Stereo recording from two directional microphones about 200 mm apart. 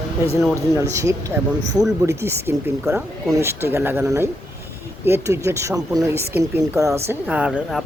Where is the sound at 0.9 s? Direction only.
15° right (ahead or behind).